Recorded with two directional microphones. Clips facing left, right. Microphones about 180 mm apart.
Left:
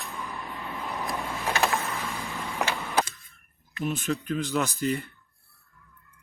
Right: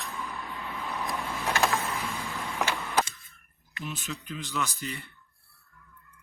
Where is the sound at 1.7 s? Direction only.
Centre (ahead or behind).